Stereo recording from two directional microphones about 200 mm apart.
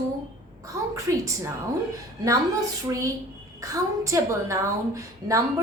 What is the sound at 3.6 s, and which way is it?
A woman's voice, 15° right (ahead or behind).